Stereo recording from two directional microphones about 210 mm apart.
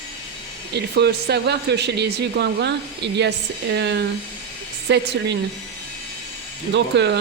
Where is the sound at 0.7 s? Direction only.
50° right (ahead or behind).